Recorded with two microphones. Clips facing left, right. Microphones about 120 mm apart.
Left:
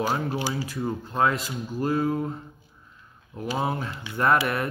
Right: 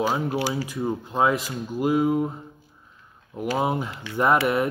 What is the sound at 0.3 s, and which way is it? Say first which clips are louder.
Speech: right 3 dB; 15° right (ahead or behind).